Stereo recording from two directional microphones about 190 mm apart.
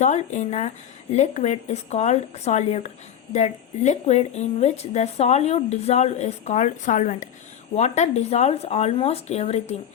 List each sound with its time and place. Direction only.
0.0 s speech: 40° left (ahead or behind)